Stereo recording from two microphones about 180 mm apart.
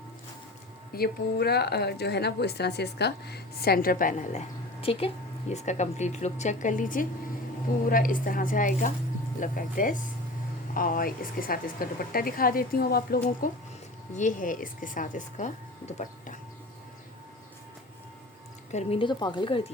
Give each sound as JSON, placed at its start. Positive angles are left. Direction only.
{"t": 0.9, "sound": "a woman's voice", "side_deg": 60}
{"t": 14.2, "sound": "a woman's voice", "side_deg": 45}
{"t": 18.7, "sound": "speech", "side_deg": 35}